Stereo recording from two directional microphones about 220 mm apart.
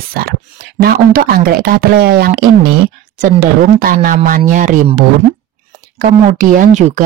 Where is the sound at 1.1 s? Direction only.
40° right (ahead or behind).